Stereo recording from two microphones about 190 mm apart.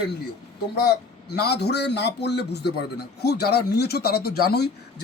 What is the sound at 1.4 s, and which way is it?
Speech, 60° left (ahead or behind).